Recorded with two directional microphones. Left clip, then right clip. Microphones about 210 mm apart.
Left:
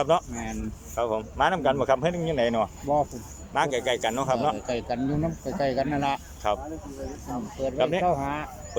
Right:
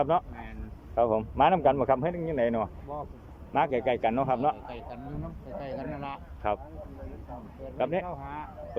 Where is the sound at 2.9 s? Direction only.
45° left (ahead or behind).